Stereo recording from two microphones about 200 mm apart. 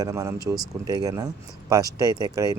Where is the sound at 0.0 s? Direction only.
15° right (ahead or behind).